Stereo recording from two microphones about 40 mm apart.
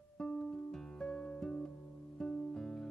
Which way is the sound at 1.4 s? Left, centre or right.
Centre.